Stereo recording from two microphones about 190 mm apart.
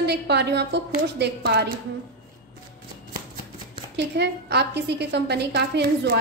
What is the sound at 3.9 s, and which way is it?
A woman's voice, 60° right (ahead or behind).